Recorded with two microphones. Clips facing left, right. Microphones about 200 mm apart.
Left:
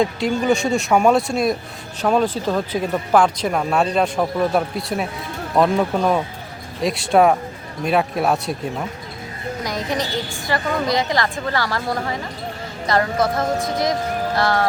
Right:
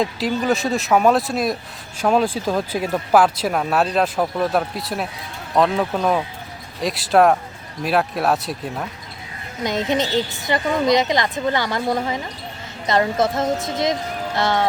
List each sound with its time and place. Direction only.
0.0 s speech: centre (ahead or behind)
9.6 s a woman's voice: 25° right (ahead or behind)